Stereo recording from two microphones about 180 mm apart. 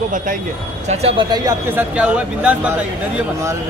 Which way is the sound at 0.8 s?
35° right (ahead or behind).